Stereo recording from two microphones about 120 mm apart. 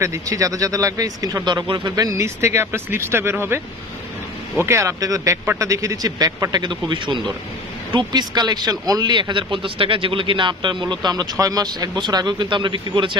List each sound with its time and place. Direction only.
0.0 s a man's voice: 25° right (ahead or behind); by 13.1 s 40° right (ahead or behind)